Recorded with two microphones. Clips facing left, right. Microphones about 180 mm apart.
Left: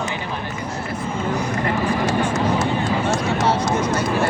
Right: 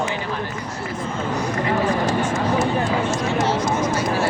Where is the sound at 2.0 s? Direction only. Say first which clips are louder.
Left 1 dB; 75° left (ahead or behind).